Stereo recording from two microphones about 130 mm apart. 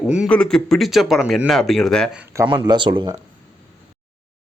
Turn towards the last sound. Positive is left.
turn(degrees=-35)  # may be behind; listen again after turning